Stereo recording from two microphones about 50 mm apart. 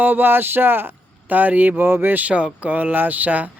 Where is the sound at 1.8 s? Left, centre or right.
Right.